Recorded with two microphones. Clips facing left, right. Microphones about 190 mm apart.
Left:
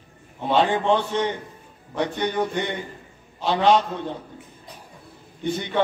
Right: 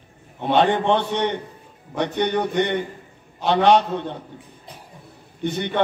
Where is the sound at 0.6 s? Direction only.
65° right (ahead or behind).